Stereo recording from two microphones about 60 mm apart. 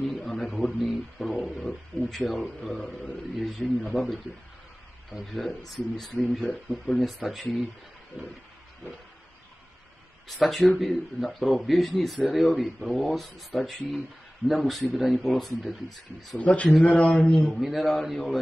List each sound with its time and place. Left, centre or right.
0.0 s a sound: centre
0.7 s a man's voice: centre
2.8 s speech: centre
3.3 s a man's voice: centre
5.2 s a man's voice: centre
8.2 s a sound: right
10.2 s a man's voice: centre
16.3 s speech: left
17.6 s a man's voice: centre